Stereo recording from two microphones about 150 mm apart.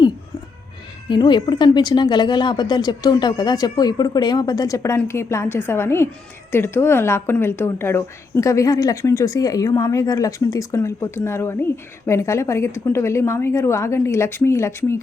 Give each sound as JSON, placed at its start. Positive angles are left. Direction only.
{"t": 1.0, "sound": "a woman's voice", "side_deg": 30}